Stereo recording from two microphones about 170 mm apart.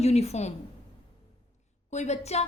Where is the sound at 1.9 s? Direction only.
40° left (ahead or behind).